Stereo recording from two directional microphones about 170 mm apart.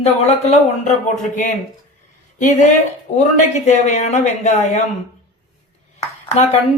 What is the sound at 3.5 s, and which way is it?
Speech, 45° left (ahead or behind).